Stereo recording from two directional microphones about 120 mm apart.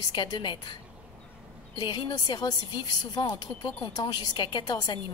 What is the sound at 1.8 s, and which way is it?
A woman's voice, 35° left (ahead or behind).